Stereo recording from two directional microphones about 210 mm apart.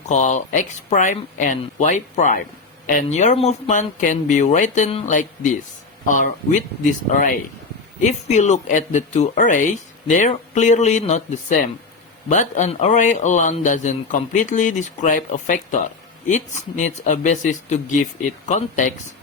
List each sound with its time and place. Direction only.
0.1 s speech: 35° left (ahead or behind)